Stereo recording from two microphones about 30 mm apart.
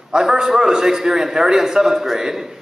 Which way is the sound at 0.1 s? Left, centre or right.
Right.